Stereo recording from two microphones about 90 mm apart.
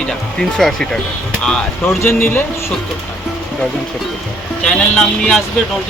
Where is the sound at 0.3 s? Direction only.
5° left (ahead or behind).